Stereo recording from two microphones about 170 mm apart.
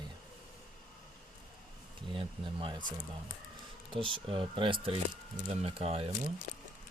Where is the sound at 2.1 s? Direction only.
30° right (ahead or behind).